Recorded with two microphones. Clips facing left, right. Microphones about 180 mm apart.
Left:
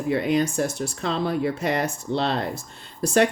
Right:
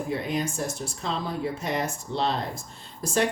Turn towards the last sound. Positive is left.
turn(degrees=65)  # may be behind; listen again after turning